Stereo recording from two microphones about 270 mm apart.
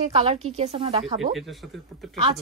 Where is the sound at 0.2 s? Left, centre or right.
Right.